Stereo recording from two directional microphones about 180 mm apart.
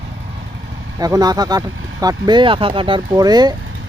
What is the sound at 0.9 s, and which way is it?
Speech, 20° right (ahead or behind).